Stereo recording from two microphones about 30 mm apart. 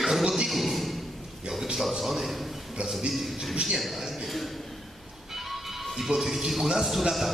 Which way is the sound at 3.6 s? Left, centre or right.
Centre.